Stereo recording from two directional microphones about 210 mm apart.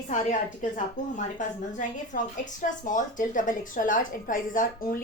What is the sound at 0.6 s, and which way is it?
A woman's voice, 35° left (ahead or behind).